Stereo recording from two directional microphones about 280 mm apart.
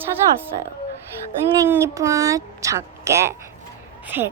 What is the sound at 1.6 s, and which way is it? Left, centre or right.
A woman's voice, centre.